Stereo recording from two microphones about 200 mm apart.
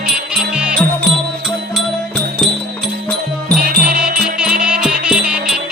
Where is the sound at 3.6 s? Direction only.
45° right (ahead or behind).